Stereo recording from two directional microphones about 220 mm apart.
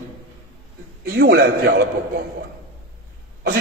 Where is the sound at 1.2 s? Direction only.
50° right (ahead or behind).